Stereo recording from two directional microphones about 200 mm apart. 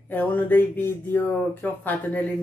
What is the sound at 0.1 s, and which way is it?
Speech, 10° left (ahead or behind).